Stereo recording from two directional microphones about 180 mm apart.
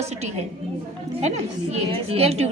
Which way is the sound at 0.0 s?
40° right (ahead or behind).